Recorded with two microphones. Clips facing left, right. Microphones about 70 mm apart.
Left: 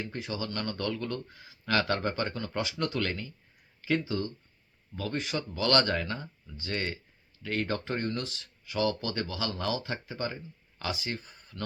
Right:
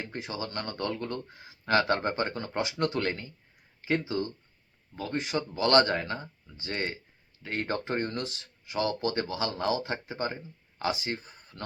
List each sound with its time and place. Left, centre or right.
0.1 s speech: right
5.4 s speech: right